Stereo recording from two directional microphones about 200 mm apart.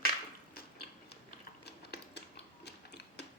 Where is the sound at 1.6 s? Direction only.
55° left (ahead or behind).